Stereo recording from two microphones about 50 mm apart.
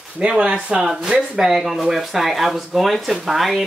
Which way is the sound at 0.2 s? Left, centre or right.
Right.